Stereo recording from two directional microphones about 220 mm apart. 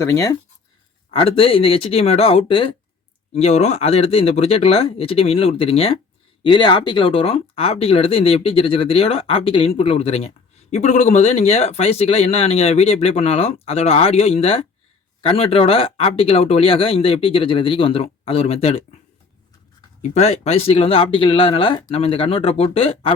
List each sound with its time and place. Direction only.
0.0 s speech: 15° left (ahead or behind)
1.1 s speech: 25° left (ahead or behind)
20.0 s speech: 30° left (ahead or behind)